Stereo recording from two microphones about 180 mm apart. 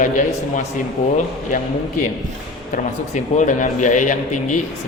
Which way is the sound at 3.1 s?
45° left (ahead or behind).